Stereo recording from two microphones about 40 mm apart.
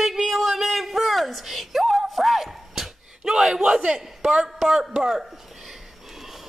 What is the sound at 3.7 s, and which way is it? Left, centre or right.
Speech, right.